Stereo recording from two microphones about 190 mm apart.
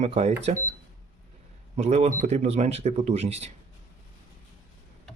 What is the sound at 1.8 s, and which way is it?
Speech, 35° right (ahead or behind).